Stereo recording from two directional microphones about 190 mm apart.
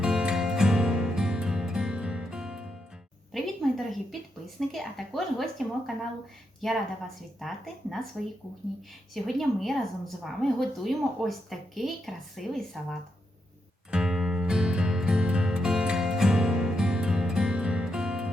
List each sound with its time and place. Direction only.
0.0 s music: 5° right (ahead or behind)
3.3 s a sound: centre (ahead or behind)
4.7 s a woman's voice: centre (ahead or behind)
7.3 s a woman's voice: centre (ahead or behind)
9.1 s a woman's voice: centre (ahead or behind)
13.9 s music: centre (ahead or behind)